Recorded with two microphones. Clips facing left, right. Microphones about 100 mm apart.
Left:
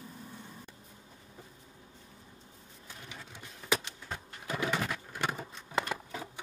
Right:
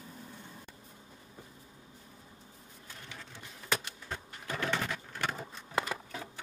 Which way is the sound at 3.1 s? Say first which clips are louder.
Even; 15° left (ahead or behind).